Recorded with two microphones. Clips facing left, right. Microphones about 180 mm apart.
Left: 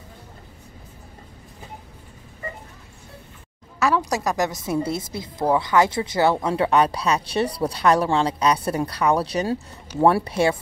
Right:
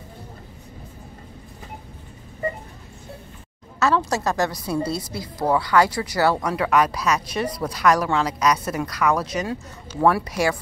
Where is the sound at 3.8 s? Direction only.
15° left (ahead or behind).